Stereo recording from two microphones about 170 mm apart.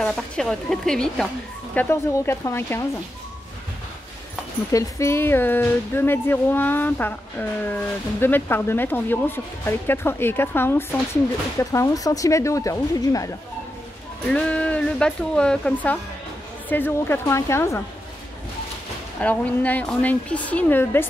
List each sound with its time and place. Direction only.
0.0 s a woman's voice: 5° left (ahead or behind)
1.8 s speech: 15° left (ahead or behind)
4.7 s speech: 15° left (ahead or behind)
14.3 s speech: 5° left (ahead or behind)
19.1 s speech: 10° left (ahead or behind)